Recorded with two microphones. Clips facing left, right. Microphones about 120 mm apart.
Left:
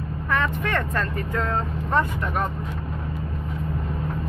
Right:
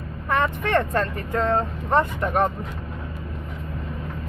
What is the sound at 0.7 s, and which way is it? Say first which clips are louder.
Speech: right 4 dB; 35° right (ahead or behind).